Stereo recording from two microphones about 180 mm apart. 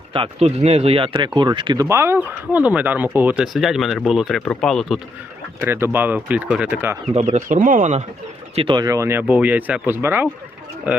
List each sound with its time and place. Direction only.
0.1 s speech: 35° right (ahead or behind); by 4.9 s centre (ahead or behind)
5.5 s speech: 15° right (ahead or behind)
7.1 s speech: 35° right (ahead or behind)
8.5 s speech: 25° right (ahead or behind); by 11.0 s 10° right (ahead or behind)